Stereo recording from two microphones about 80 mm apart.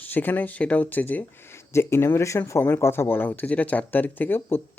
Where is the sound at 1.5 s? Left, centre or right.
Left.